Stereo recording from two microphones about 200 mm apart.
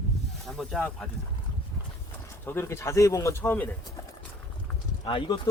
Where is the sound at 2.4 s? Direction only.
10° left (ahead or behind).